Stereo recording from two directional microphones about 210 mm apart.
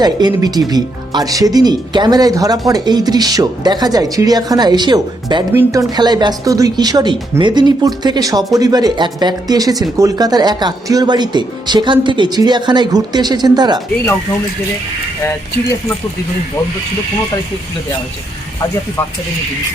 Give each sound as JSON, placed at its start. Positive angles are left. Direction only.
{"t": 0.0, "sound": "speech", "side_deg": -20}